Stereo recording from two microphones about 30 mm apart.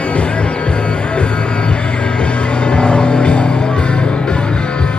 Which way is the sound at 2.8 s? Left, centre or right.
Left.